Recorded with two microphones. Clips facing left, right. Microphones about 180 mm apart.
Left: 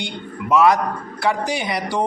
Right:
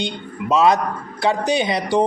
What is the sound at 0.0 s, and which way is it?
A man's voice, 20° right (ahead or behind).